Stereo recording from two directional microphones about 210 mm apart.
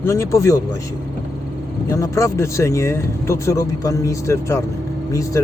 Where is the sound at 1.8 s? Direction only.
15° left (ahead or behind).